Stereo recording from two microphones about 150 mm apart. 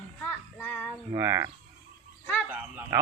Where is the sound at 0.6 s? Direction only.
15° left (ahead or behind).